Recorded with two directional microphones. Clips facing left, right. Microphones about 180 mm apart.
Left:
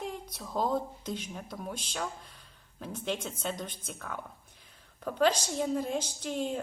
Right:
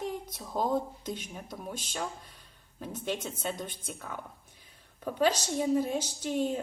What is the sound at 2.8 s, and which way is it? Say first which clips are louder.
Speech: even; 5° right (ahead or behind).